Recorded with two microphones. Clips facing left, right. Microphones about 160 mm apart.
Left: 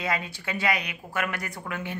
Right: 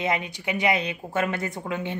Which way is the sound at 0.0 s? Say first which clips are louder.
Right 3 dB; 20° right (ahead or behind).